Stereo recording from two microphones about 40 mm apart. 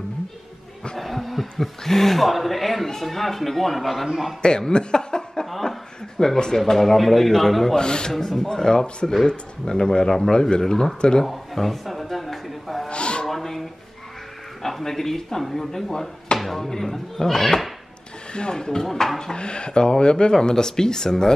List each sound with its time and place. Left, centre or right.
0.9 s a man's voice: centre
4.4 s speech: centre
5.3 s cough: centre
6.1 s speech: centre
7.7 s speech: centre
8.1 s speech: centre
11.2 s a sound: centre
12.9 s a sound: left
13.3 s a sound: centre
14.6 s speech: centre
18.3 s speech: left
18.8 s speech: centre
19.3 s speech: left